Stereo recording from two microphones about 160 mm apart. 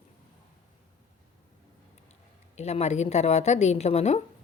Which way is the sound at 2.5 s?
45° left (ahead or behind).